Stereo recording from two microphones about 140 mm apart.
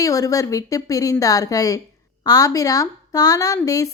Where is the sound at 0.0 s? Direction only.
25° left (ahead or behind).